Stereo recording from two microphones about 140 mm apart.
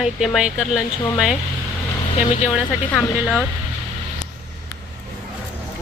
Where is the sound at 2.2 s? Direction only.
55° left (ahead or behind).